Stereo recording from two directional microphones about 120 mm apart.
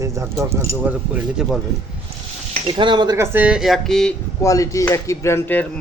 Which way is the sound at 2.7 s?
40° right (ahead or behind).